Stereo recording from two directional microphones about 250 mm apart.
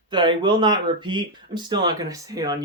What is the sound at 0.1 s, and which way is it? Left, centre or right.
Speech, centre.